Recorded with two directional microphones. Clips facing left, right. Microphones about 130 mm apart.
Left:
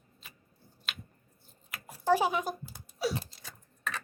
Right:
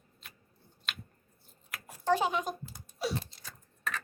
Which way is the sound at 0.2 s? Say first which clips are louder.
Even; centre (ahead or behind).